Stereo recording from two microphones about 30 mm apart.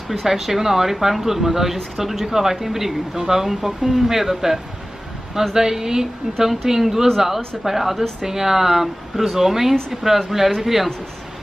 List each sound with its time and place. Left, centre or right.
0.1 s speech: centre